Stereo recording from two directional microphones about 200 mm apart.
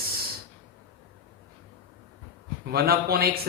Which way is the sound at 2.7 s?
50° right (ahead or behind).